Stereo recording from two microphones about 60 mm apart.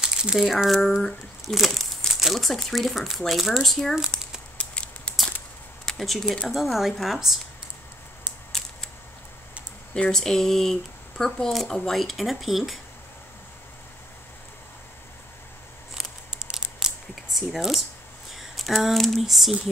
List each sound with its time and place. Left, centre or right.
0.0 s speech: centre
4.1 s speech: centre
4.6 s scissors: centre
5.9 s speech: centre
8.5 s a sound: centre
10.0 s speech: centre
16.5 s a sound: centre
18.3 s speech: centre